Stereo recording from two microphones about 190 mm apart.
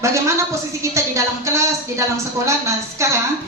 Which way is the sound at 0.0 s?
15° right (ahead or behind).